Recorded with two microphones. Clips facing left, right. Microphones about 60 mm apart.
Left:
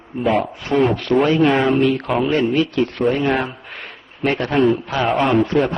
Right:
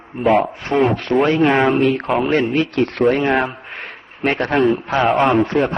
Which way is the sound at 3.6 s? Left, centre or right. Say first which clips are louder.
Right 3 dB; right.